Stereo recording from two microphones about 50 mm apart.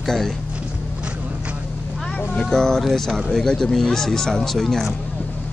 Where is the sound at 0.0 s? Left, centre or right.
Centre.